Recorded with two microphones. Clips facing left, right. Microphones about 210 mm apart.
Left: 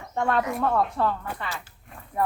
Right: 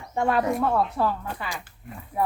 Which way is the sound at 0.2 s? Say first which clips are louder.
Right 2 dB; 5° right (ahead or behind).